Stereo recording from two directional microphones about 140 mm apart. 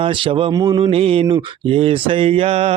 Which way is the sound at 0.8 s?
40° right (ahead or behind).